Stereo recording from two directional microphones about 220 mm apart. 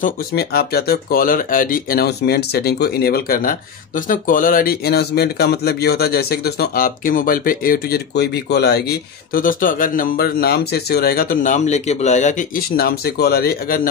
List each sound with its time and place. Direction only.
0.0 s speech: 45° left (ahead or behind)